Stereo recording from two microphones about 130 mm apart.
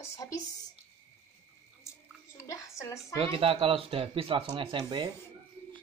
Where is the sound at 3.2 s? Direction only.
45° right (ahead or behind).